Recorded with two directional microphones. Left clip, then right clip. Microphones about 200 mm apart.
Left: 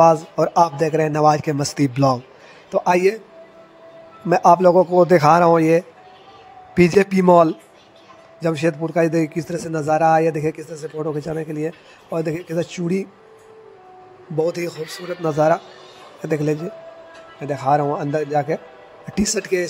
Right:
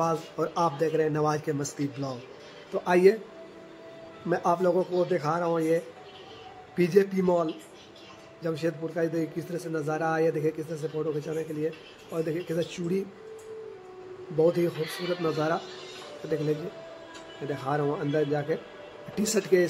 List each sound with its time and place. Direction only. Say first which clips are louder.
0.0 s a man's voice: left 14 dB; 30° left (ahead or behind)
2.7 s speech: left 5 dB; 30° left (ahead or behind)
4.3 s a man's voice: left 12 dB; 35° left (ahead or behind)
14.4 s a man's voice: left 2 dB; 30° left (ahead or behind)
17.5 s a man's voice: left 11 dB; 30° left (ahead or behind)